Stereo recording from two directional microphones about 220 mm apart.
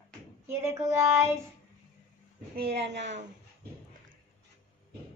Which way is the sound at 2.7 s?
50° right (ahead or behind).